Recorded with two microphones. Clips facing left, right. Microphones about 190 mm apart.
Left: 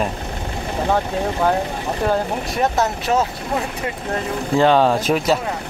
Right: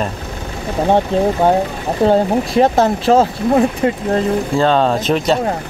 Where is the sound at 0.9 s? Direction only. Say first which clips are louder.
Right 8 dB; 25° right (ahead or behind).